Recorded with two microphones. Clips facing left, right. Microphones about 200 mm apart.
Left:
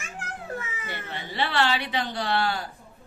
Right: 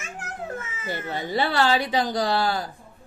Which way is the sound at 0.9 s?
35° right (ahead or behind).